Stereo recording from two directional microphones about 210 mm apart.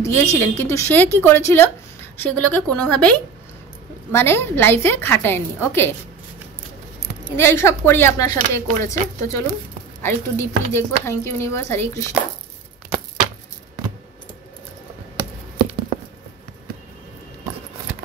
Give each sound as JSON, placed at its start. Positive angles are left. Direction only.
{"t": 0.0, "sound": "speech", "side_deg": 15}
{"t": 7.3, "sound": "speech", "side_deg": 10}
{"t": 15.5, "sound": "patter", "side_deg": -25}